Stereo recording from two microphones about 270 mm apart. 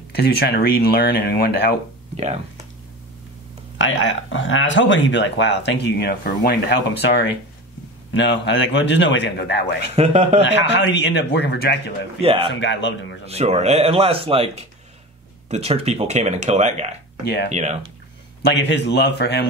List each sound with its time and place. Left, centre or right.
0.1 s speech: left
2.1 s speech: right
3.7 s speech: left
9.9 s speech: right
10.4 s speech: left
12.2 s speech: right
12.5 s speech: left
13.3 s speech: right
17.2 s speech: left
17.5 s speech: right
18.4 s speech: left